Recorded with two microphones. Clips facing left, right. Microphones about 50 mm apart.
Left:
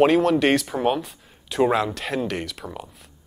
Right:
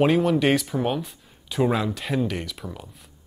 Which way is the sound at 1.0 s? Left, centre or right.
Centre.